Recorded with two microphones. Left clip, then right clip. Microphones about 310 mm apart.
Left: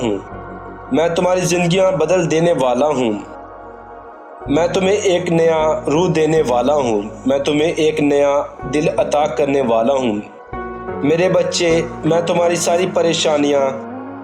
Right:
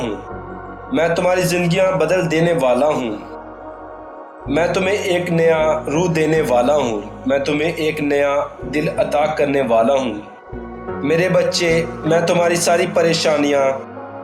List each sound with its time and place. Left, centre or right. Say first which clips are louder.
1.2 s speech: left 1 dB; left
4.4 s speech: left 2 dB; left
9.0 s speech: left 1 dB; centre
9.4 s speech: even; left